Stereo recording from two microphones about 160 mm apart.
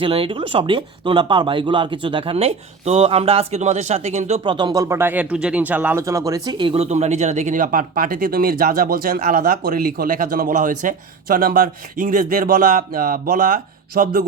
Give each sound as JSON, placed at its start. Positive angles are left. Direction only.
{"t": 0.0, "sound": "speech", "side_deg": -35}
{"t": 4.4, "sound": "speech", "side_deg": -30}
{"t": 6.8, "sound": "speech", "side_deg": -45}